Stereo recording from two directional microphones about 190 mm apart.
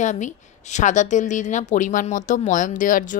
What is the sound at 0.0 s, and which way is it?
Speech, 40° left (ahead or behind).